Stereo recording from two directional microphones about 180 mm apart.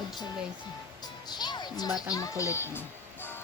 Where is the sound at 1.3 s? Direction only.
25° left (ahead or behind).